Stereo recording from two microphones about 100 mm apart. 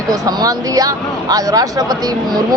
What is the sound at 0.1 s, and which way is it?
Speech, 35° right (ahead or behind).